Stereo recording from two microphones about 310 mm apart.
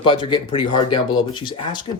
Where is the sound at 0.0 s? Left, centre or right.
Centre.